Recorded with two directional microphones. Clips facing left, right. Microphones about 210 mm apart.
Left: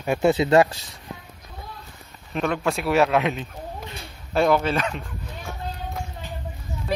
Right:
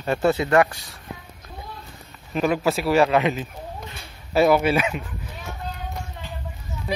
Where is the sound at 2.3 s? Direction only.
5° right (ahead or behind).